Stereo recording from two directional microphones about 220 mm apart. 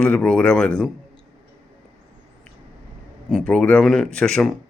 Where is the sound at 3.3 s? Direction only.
Centre (ahead or behind).